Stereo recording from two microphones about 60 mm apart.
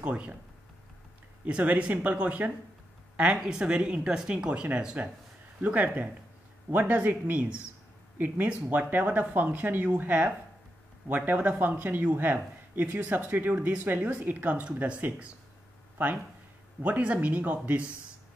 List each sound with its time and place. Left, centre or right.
0.0 s speech: right
1.4 s speech: right
3.3 s speech: centre
16.8 s speech: right